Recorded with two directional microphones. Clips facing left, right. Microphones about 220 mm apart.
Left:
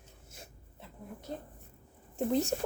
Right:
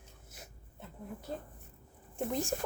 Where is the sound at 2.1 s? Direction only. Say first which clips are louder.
Left 5 dB; 40° left (ahead or behind).